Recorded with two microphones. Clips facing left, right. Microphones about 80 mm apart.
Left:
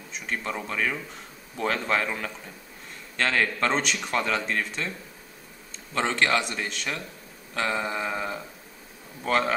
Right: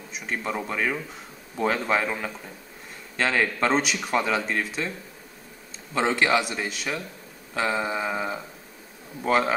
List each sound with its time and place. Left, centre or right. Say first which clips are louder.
0.1 s speech: right 2 dB; centre
5.9 s speech: right 2 dB; centre